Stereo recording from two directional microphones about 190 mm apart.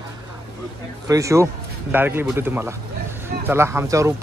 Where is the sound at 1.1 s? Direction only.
15° right (ahead or behind).